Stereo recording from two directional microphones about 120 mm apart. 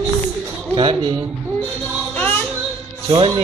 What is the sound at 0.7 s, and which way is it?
Speech, 45° right (ahead or behind).